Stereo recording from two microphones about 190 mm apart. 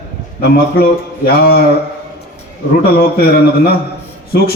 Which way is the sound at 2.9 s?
55° left (ahead or behind).